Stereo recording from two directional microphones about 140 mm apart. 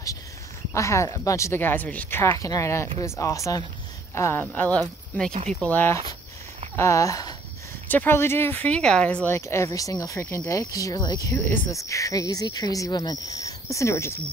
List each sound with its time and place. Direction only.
0.7 s speech: 20° left (ahead or behind)